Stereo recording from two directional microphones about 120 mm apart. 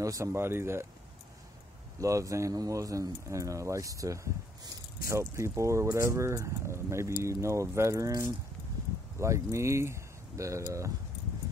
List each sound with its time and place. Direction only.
0.0 s speech: 25° right (ahead or behind)
2.0 s speech: 25° right (ahead or behind)